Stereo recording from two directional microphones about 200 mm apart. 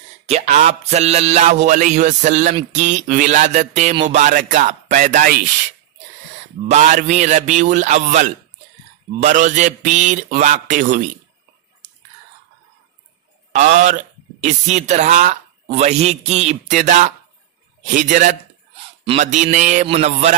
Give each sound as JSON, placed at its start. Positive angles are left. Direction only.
{"t": 0.3, "sound": "speech", "side_deg": -30}
{"t": 6.7, "sound": "speech", "side_deg": -35}
{"t": 13.5, "sound": "speech", "side_deg": -40}